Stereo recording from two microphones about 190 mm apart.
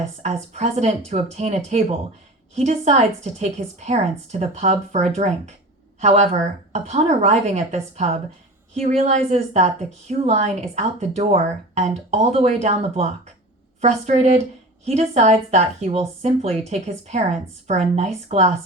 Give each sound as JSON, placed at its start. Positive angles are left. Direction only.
{"t": 0.2, "sound": "a woman's voice", "side_deg": -35}